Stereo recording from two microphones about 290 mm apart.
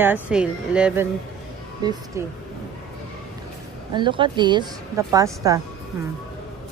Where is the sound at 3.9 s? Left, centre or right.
Centre.